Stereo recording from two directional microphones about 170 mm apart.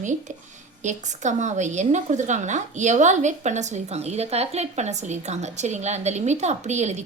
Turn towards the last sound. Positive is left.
turn(degrees=-40)  # may be behind; listen again after turning